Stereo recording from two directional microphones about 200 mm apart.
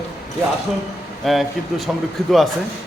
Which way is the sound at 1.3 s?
Centre (ahead or behind).